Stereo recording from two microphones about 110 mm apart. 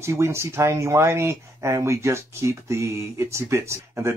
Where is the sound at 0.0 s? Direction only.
25° right (ahead or behind).